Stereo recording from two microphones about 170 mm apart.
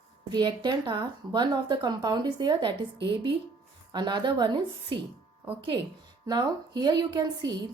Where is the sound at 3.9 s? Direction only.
25° right (ahead or behind).